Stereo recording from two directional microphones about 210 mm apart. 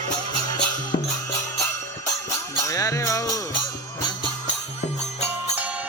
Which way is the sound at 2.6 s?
15° left (ahead or behind).